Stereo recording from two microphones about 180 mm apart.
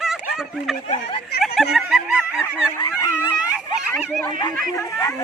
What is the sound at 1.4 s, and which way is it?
Honk, centre (ahead or behind).